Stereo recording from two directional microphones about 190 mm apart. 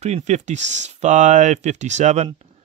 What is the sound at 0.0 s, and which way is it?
Speech, 35° right (ahead or behind).